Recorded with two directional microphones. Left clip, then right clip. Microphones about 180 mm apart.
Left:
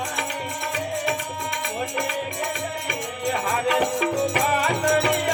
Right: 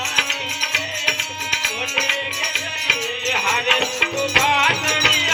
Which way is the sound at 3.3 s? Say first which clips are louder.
Right 4 dB; 30° left (ahead or behind).